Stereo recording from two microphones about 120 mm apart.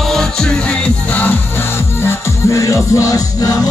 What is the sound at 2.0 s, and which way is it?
Music, 25° left (ahead or behind).